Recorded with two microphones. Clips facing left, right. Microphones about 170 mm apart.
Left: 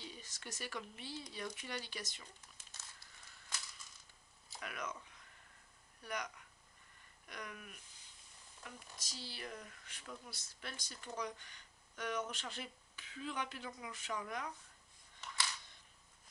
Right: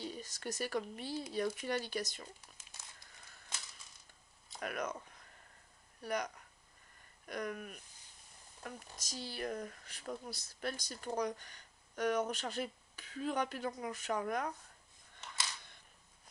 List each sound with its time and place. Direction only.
0.0 s speech: 40° right (ahead or behind)
4.6 s speech: 50° right (ahead or behind)